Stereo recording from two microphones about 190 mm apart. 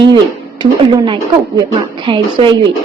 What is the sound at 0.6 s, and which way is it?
A woman's voice, 25° right (ahead or behind).